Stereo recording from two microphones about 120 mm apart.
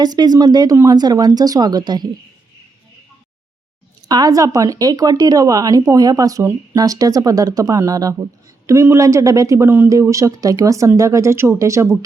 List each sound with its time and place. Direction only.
0.0 s speech: 35° right (ahead or behind)
4.1 s speech: 30° right (ahead or behind)